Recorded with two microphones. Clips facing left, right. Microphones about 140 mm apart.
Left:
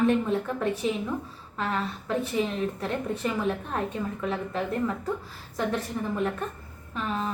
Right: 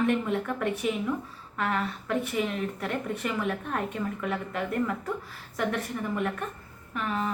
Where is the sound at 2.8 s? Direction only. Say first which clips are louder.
Left 2 dB; 30° left (ahead or behind).